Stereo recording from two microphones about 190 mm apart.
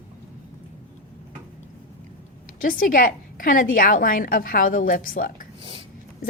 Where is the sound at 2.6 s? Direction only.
45° left (ahead or behind).